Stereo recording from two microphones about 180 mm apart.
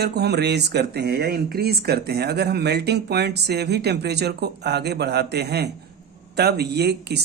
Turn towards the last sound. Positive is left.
turn(degrees=-65)  # may be behind; listen again after turning